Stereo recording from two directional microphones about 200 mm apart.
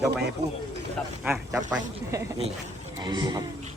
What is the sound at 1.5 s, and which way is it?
A man's voice, 15° right (ahead or behind).